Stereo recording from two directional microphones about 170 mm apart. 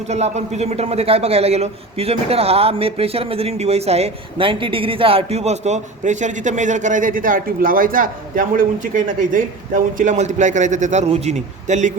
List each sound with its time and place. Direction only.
0.1 s a man's voice: 40° right (ahead or behind)